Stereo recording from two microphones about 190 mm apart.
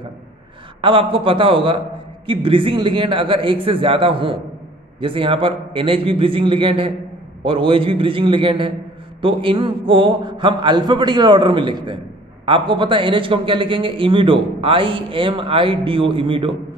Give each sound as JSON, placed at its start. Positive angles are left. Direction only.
{"t": 0.7, "sound": "a man's voice", "side_deg": -25}